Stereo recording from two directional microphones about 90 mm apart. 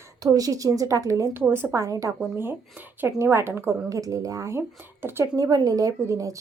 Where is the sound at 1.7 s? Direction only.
35° right (ahead or behind).